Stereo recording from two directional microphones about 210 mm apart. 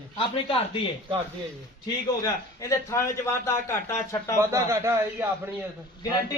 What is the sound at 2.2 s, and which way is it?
Speech, 15° left (ahead or behind).